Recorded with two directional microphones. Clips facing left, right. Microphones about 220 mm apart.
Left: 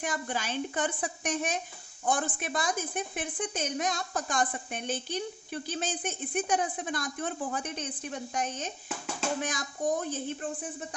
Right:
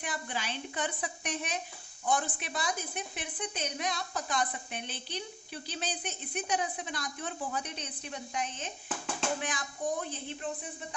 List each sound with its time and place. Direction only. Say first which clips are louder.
0.0 s a woman's voice: left 4 dB; 45° left (ahead or behind)